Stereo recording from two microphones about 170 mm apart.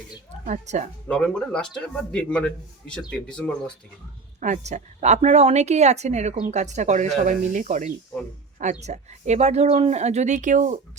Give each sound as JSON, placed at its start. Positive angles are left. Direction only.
{"t": 0.4, "sound": "a woman's voice", "side_deg": -45}
{"t": 1.0, "sound": "speech", "side_deg": 5}
{"t": 4.4, "sound": "a woman's voice", "side_deg": -45}